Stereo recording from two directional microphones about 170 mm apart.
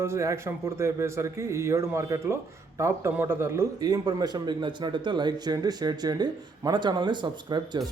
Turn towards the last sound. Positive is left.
turn(degrees=-25)  # may be behind; listen again after turning